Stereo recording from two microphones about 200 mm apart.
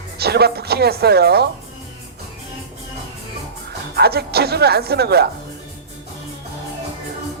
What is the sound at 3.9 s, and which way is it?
Speech, 50° right (ahead or behind).